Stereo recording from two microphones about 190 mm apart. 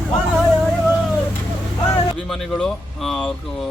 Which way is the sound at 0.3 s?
5° right (ahead or behind).